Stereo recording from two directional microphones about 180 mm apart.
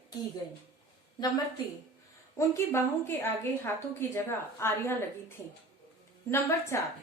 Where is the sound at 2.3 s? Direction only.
15° left (ahead or behind).